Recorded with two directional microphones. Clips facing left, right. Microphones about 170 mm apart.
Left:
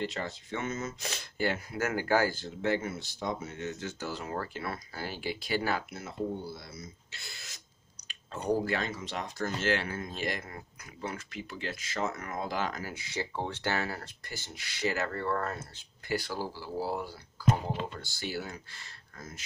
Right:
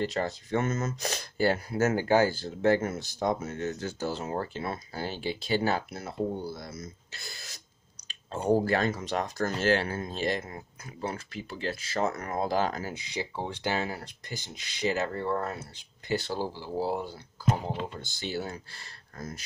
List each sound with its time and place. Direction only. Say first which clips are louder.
0.0 s speech: right 5 dB; 40° right (ahead or behind); by 2.3 s 25° right (ahead or behind)
2.3 s speech: right 6 dB; 40° right (ahead or behind)
8.7 s speech: right 6 dB; 45° right (ahead or behind)
12.9 s speech: right 1 dB; 15° right (ahead or behind); by 19.4 s 40° right (ahead or behind)